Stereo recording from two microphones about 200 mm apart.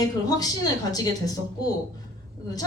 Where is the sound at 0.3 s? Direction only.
20° left (ahead or behind).